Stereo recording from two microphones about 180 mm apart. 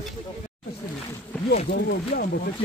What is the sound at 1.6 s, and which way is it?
Speech, 60° left (ahead or behind).